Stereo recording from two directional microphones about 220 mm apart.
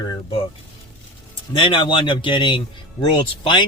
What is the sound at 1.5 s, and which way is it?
A man's voice, 20° left (ahead or behind).